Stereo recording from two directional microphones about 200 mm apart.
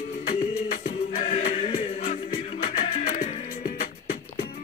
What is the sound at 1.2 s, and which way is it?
Music, 45° left (ahead or behind).